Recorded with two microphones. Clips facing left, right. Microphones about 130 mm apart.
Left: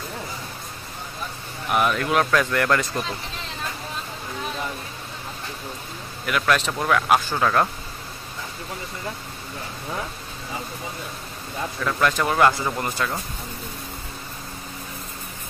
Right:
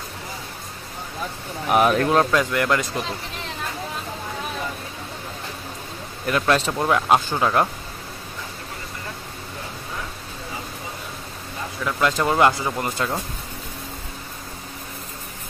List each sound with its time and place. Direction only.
1.7 s speech: 45° right (ahead or behind)
2.0 s speech: 25° right (ahead or behind)
6.2 s speech: 30° right (ahead or behind)
6.6 s speech: 15° right (ahead or behind)
6.9 s speech: 25° right (ahead or behind)
11.8 s speech: 20° right (ahead or behind)